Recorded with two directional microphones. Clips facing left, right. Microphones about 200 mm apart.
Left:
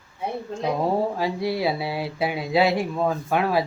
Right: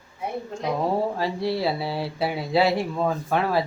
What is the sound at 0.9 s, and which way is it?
Speech, 10° left (ahead or behind).